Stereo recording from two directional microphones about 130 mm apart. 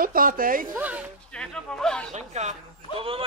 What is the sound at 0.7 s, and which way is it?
Speech, 10° right (ahead or behind).